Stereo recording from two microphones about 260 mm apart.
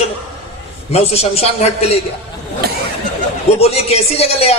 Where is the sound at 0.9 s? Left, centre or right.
Left.